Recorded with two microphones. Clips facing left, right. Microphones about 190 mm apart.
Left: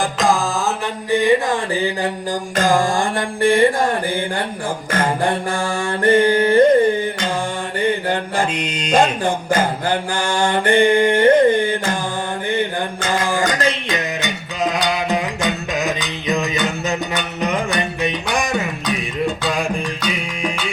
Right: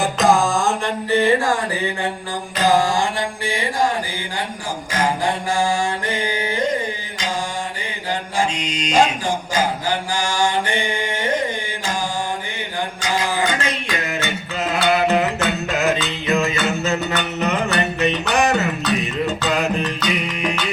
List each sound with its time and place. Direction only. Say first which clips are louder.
0.0 s mantra: right 2 dB; centre (ahead or behind)
1.1 s speech: left 1 dB; 15° left (ahead or behind)
2.6 s mantra: even; 50° left (ahead or behind)
13.9 s music: left 1 dB; 15° left (ahead or behind)